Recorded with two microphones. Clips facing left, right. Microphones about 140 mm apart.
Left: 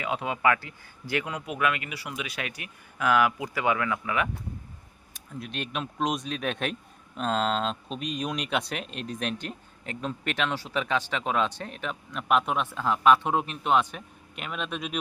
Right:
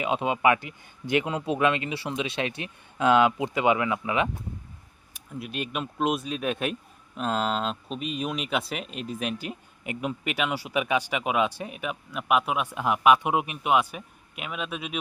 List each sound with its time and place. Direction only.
0.0 s speech: 20° right (ahead or behind)
5.1 s speech: 5° right (ahead or behind)